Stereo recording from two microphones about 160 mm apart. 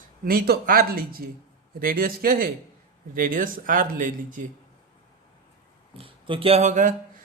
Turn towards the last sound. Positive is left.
turn(degrees=-55)  # may be behind; listen again after turning